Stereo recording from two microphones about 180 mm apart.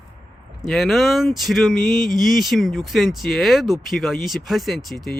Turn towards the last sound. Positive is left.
turn(degrees=0)  # may be behind; listen again after turning